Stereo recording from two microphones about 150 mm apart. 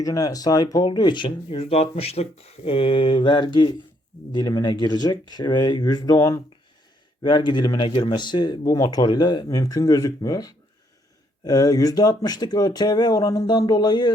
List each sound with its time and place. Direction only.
0.0 s speech: 25° left (ahead or behind); by 2.2 s 40° left (ahead or behind)
2.6 s mantra: 40° left (ahead or behind)
4.3 s speech: 25° left (ahead or behind)
7.2 s speech: 30° left (ahead or behind)